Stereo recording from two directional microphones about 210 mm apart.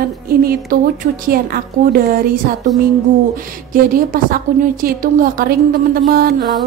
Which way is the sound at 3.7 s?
40° right (ahead or behind).